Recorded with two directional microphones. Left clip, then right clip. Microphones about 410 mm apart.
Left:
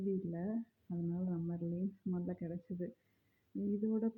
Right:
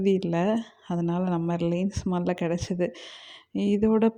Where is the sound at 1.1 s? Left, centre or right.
Right.